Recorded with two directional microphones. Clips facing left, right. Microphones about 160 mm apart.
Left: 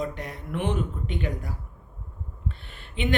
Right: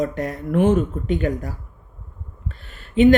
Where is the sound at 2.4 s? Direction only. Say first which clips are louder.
Even; 40° right (ahead or behind).